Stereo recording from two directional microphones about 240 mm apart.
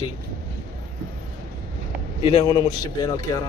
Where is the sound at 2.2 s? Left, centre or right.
Left.